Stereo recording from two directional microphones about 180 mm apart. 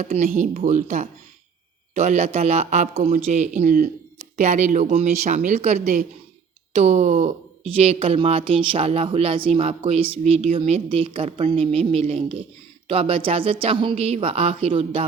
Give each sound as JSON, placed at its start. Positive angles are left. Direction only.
{"t": 0.0, "sound": "speech", "side_deg": -40}